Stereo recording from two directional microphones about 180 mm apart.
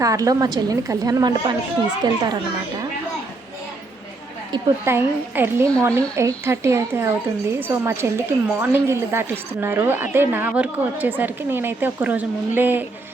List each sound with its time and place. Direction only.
0.0 s a woman's voice: 20° right (ahead or behind)
4.5 s a woman's voice: 15° right (ahead or behind)